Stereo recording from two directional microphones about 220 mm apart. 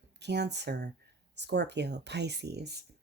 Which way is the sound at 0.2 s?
50° right (ahead or behind).